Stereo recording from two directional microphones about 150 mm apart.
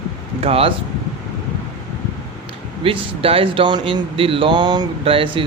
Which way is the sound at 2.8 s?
40° right (ahead or behind).